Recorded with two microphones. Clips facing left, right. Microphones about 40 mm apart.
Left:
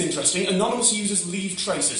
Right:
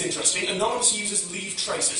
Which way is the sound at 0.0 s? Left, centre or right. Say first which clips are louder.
Left 3 dB; centre.